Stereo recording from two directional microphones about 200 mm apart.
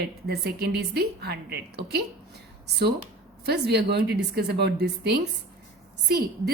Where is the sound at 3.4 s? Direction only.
55° right (ahead or behind).